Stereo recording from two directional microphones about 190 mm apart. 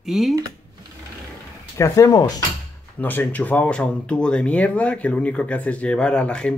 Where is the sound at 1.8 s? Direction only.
15° left (ahead or behind).